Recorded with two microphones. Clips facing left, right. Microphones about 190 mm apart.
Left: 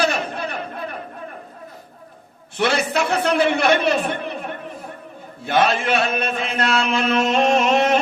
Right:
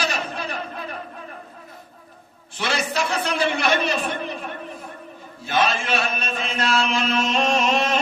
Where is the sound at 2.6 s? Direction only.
60° left (ahead or behind).